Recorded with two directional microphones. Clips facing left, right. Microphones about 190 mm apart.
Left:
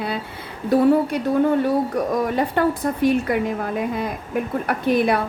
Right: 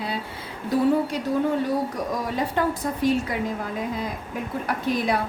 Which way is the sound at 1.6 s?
60° left (ahead or behind).